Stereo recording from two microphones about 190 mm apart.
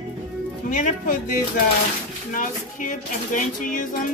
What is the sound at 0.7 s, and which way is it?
Speech, 40° left (ahead or behind).